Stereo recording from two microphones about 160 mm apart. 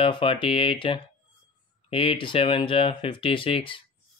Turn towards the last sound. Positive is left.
turn(degrees=35)  # may be behind; listen again after turning